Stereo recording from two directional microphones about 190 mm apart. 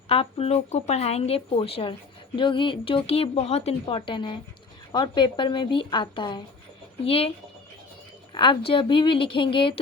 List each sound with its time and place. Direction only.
0.1 s speech: 30° left (ahead or behind)